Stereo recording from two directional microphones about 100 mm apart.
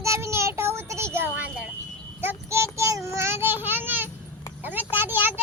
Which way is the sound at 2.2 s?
25° right (ahead or behind).